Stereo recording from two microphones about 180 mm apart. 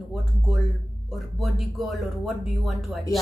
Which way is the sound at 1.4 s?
Centre (ahead or behind).